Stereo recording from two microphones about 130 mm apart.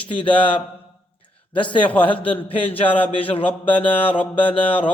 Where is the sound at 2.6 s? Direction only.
45° left (ahead or behind).